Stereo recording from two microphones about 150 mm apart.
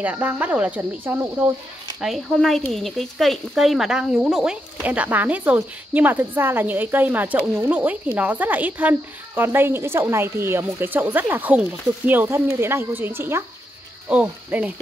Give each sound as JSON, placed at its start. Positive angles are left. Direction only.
{"t": 0.0, "sound": "speech", "side_deg": -10}